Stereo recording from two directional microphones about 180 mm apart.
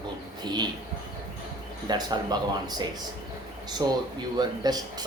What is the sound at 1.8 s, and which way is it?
Speech, 20° right (ahead or behind).